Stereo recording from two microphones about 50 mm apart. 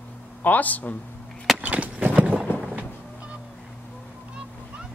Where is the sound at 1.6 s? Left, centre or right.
Right.